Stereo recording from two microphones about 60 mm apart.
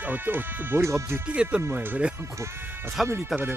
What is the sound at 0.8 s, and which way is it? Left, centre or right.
Speech, right.